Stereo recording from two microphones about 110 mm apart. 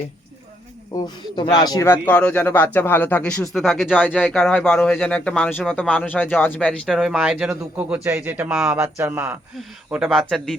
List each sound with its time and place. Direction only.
0.9 s speech: 40° left (ahead or behind)
1.8 s speech: 20° left (ahead or behind)
3.5 s speech: centre (ahead or behind)
3.9 s speech: 15° left (ahead or behind)
6.8 s speech: centre (ahead or behind)
7.5 s a man's voice: 20° right (ahead or behind)
10.1 s speech: centre (ahead or behind)